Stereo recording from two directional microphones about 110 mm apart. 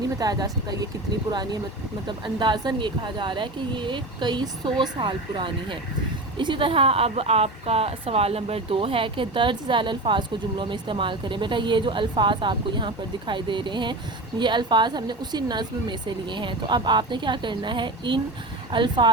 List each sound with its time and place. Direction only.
0.2 s speech: 35° right (ahead or behind)